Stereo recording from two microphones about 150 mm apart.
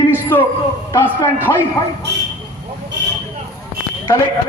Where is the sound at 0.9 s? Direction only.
15° left (ahead or behind).